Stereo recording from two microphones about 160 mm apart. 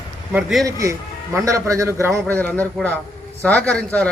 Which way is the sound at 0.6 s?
20° right (ahead or behind).